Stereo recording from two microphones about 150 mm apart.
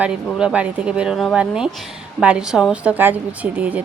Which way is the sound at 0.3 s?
5° right (ahead or behind).